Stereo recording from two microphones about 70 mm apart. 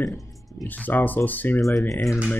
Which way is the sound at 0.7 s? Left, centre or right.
Left.